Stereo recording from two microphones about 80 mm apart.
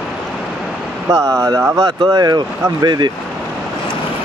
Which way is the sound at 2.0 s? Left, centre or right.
Right.